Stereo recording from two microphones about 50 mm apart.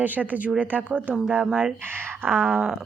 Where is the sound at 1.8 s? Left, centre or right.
Right.